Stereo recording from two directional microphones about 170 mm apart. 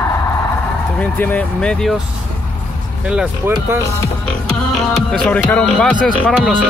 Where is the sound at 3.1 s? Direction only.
5° right (ahead or behind).